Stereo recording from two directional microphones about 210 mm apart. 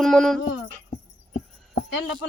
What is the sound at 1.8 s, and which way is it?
Speech, 65° left (ahead or behind).